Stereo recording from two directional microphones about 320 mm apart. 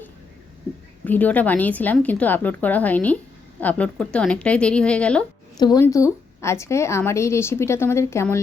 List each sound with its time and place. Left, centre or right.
1.0 s speech: centre